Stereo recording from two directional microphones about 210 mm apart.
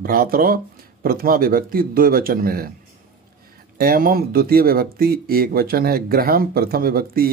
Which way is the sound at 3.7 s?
45° right (ahead or behind).